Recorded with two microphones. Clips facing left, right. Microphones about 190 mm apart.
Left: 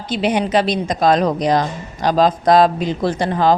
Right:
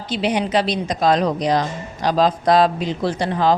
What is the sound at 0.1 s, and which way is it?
A woman's voice, 50° left (ahead or behind).